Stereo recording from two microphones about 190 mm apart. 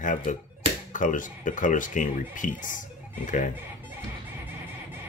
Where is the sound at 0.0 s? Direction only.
45° left (ahead or behind).